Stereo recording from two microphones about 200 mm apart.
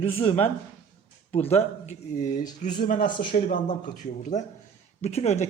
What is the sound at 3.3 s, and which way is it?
Speech, 40° left (ahead or behind).